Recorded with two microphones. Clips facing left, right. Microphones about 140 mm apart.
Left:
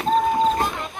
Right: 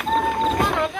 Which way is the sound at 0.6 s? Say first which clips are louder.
Right 4 dB; 90° right.